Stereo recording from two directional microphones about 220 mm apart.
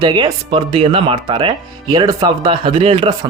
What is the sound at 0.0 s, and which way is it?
Speech, 20° right (ahead or behind).